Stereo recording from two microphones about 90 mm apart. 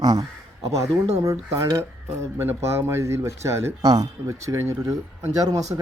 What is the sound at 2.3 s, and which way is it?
Speech, 25° right (ahead or behind).